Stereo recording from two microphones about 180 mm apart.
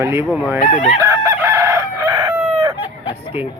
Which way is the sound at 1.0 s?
15° right (ahead or behind).